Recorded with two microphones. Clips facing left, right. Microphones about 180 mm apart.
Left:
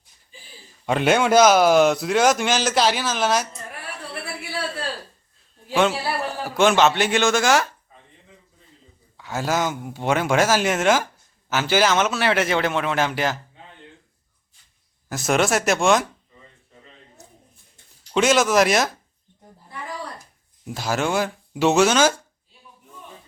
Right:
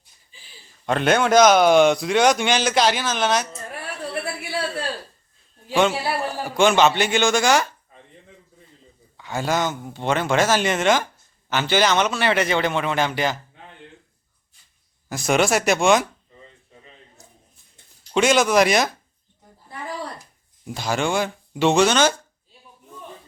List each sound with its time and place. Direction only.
0.9 s speech: 5° left (ahead or behind)
5.9 s a man's voice: 15° right (ahead or behind)
6.2 s speech: centre (ahead or behind)
9.1 s speech: centre (ahead or behind)
15.1 s speech: centre (ahead or behind)
18.1 s speech: centre (ahead or behind)
20.7 s speech: 5° left (ahead or behind)